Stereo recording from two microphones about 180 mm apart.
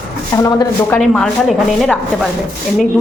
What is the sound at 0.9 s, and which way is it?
Speech, 5° left (ahead or behind).